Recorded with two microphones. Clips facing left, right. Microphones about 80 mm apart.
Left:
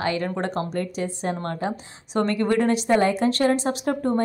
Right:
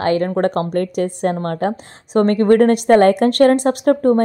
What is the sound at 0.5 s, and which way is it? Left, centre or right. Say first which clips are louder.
A woman's voice: right 8 dB; right.